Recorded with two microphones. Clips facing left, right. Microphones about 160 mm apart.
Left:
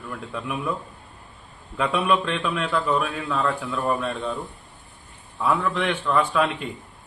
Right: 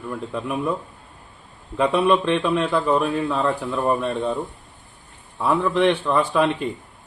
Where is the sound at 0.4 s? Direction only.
35° right (ahead or behind).